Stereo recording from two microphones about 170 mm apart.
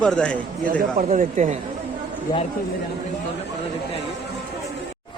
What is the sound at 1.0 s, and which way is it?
Speech, 50° right (ahead or behind).